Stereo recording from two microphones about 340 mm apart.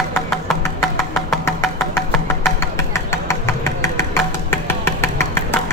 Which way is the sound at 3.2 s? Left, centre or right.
Centre.